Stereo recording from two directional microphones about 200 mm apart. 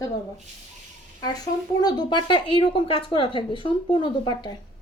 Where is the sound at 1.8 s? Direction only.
20° left (ahead or behind).